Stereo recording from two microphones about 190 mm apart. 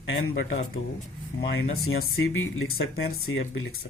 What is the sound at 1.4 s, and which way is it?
Speech, 60° left (ahead or behind).